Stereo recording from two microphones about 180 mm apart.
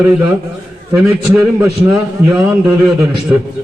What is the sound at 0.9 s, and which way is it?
A man's voice, 5° right (ahead or behind).